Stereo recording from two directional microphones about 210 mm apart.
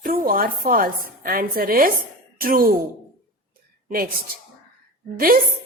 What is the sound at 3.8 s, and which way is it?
Speech, 45° right (ahead or behind).